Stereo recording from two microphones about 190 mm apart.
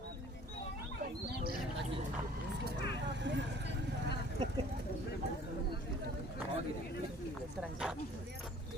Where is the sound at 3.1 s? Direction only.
70° right (ahead or behind).